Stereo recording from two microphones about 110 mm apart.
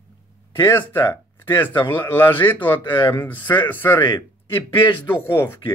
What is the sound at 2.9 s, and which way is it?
Speech, 45° left (ahead or behind).